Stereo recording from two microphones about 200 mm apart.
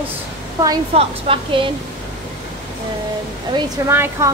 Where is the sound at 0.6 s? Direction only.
25° right (ahead or behind).